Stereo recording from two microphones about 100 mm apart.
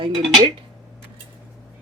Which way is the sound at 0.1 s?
Centre (ahead or behind).